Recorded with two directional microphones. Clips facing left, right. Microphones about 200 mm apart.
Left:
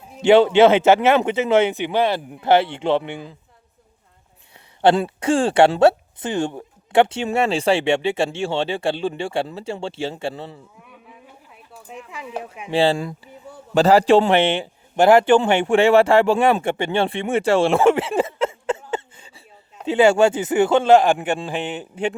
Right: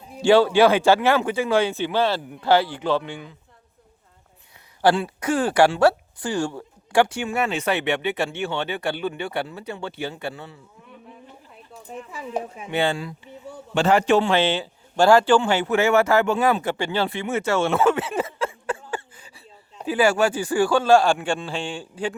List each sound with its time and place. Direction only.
0.2 s speech: 20° left (ahead or behind)
5.0 s speech: 25° left (ahead or behind)
11.7 s speech: 5° left (ahead or behind)
12.7 s speech: 30° left (ahead or behind)
13.0 s speech: 45° left (ahead or behind)
13.7 s speech: 35° left (ahead or behind)